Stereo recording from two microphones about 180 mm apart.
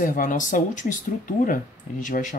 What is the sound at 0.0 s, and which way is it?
Speech, 50° left (ahead or behind).